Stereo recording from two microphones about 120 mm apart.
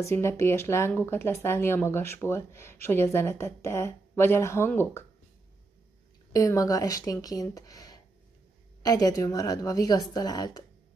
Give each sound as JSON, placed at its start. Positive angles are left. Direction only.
{"t": 0.0, "sound": "speech", "side_deg": 25}
{"t": 6.3, "sound": "a woman's voice", "side_deg": 30}